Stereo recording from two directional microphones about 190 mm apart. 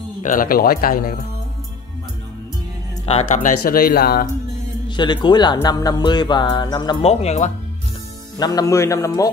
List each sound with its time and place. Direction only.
0.2 s speech: 45° left (ahead or behind)
3.1 s speech: 40° left (ahead or behind)
4.8 s speech: 25° left (ahead or behind)
8.4 s a man's voice: 20° left (ahead or behind)